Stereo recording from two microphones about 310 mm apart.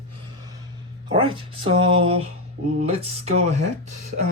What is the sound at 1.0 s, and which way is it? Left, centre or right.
Speech, centre.